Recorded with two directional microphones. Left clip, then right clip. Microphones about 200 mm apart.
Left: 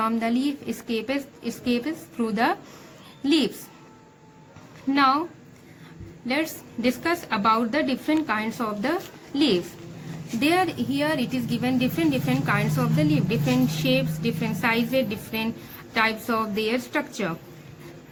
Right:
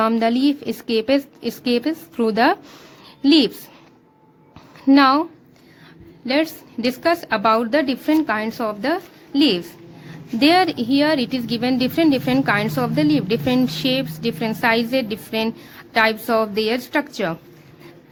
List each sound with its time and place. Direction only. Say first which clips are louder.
0.0 s a woman's voice: right 7 dB; 50° right (ahead or behind)
4.9 s a woman's voice: right 6 dB; 55° right (ahead or behind)
6.2 s a woman's voice: right 6 dB; 50° right (ahead or behind)